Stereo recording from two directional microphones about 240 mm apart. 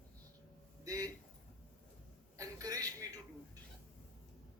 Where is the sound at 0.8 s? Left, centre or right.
Centre.